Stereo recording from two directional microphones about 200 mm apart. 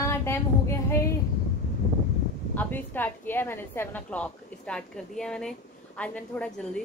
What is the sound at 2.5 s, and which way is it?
A woman's voice, 10° left (ahead or behind).